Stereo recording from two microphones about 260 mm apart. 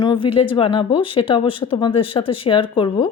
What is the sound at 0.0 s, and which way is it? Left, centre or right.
Speech, centre.